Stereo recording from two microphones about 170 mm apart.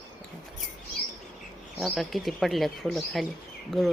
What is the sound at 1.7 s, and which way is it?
Speech, centre (ahead or behind).